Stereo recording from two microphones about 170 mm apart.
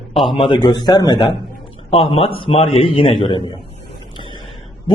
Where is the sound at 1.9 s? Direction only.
35° left (ahead or behind).